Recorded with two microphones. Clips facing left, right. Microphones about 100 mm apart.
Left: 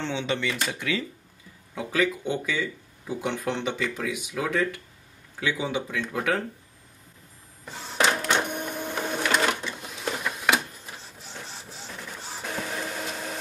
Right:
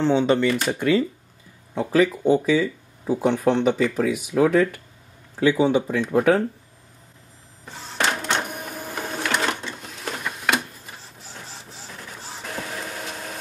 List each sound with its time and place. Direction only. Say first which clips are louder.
0.0 s speech: right 10 dB; 45° right (ahead or behind)
8.4 s printer: left 1 dB; centre (ahead or behind)